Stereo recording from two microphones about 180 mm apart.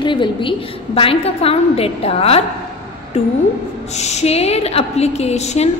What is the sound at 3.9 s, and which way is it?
A woman's voice, 40° left (ahead or behind).